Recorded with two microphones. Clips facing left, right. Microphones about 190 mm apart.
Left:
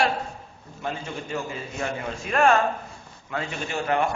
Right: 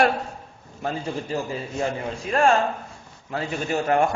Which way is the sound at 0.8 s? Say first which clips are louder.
Right 4 dB; 35° right (ahead or behind).